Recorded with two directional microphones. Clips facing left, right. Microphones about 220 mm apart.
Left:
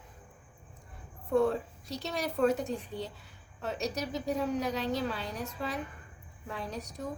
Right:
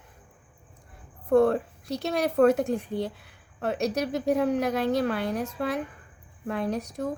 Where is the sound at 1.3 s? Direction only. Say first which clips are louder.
Right 7 dB; 70° right (ahead or behind).